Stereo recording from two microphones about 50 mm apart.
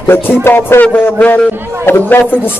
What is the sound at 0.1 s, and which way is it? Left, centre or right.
Speech, left.